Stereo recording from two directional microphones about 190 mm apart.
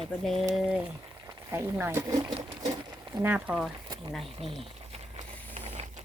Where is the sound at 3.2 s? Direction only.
10° right (ahead or behind).